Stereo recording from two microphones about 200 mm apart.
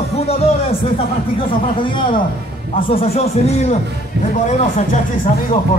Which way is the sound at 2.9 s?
30° left (ahead or behind).